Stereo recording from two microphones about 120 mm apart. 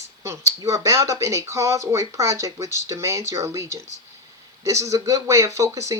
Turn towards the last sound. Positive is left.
turn(degrees=-25)  # may be behind; listen again after turning